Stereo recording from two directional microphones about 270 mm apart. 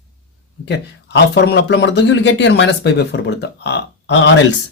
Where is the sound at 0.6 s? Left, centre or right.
Left.